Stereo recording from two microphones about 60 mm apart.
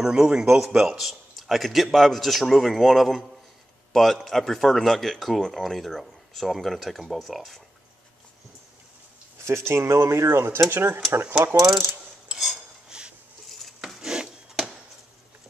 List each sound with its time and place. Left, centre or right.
0.0 s speech: centre
9.4 s speech: right
12.3 s cutlery: centre
13.5 s wood: centre
14.0 s wood: centre